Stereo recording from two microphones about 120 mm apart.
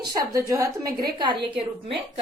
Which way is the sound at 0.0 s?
30° right (ahead or behind).